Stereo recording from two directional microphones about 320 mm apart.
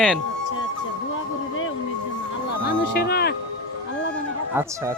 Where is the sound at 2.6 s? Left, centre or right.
Left.